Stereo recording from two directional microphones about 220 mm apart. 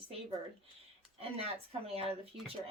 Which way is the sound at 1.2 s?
25° right (ahead or behind).